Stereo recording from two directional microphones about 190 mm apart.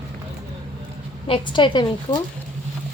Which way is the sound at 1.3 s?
25° left (ahead or behind).